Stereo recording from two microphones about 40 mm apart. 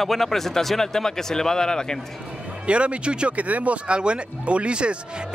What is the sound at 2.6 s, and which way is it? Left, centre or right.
Speech, right.